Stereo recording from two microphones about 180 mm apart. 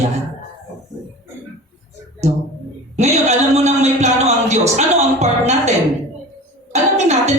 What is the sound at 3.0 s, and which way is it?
A man's voice, 40° right (ahead or behind).